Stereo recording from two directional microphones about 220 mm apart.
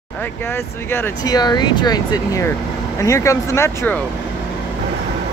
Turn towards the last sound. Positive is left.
turn(degrees=10)  # may be behind; listen again after turning